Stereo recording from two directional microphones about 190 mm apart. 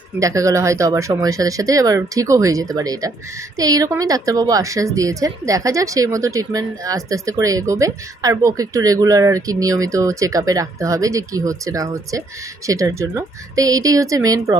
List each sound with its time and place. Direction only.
0.2 s a woman's voice: 15° right (ahead or behind)